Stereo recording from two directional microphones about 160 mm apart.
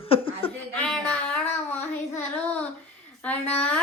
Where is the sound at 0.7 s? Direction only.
10° left (ahead or behind).